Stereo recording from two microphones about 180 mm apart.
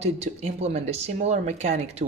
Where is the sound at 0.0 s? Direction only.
35° right (ahead or behind).